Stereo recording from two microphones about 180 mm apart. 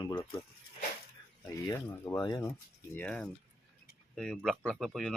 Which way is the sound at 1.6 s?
15° left (ahead or behind).